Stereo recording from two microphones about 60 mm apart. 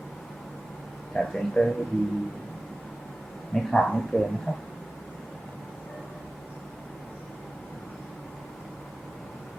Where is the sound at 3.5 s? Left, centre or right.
Centre.